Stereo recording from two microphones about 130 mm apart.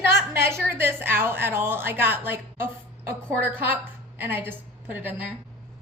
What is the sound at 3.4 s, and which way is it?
A woman's voice, 15° right (ahead or behind).